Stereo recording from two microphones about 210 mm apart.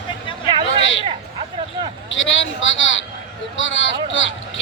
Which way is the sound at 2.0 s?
65° left (ahead or behind).